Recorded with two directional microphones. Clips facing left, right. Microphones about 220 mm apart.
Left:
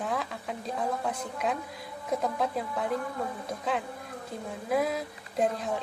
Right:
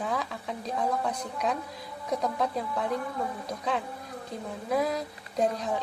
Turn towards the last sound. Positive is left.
turn(degrees=0)  # may be behind; listen again after turning